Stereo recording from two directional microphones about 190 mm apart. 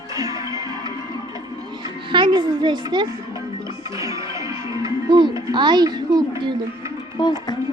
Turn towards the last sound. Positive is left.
turn(degrees=20)  # may be behind; listen again after turning